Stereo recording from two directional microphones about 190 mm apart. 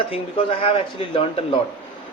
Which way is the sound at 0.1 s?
30° left (ahead or behind).